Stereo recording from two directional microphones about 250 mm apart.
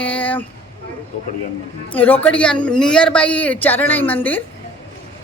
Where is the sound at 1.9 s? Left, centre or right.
Centre.